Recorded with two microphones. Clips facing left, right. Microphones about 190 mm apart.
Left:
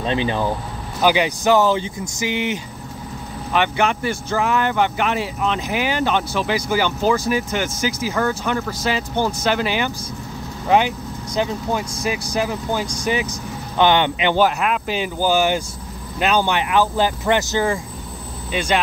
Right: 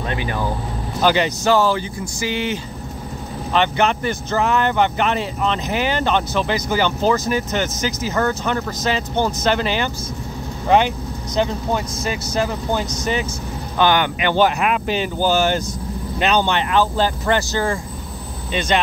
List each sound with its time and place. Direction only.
0.0 s speech: 25° left (ahead or behind)
1.0 s speech: 10° left (ahead or behind)
11.3 s speech: 5° left (ahead or behind)
13.7 s speech: 20° left (ahead or behind)
14.4 s speech: centre (ahead or behind)
15.0 s speech: 10° left (ahead or behind)